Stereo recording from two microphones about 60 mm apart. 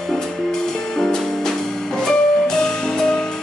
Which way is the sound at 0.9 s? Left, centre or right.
Centre.